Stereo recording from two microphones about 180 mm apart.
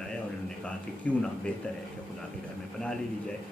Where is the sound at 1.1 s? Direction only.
5° left (ahead or behind).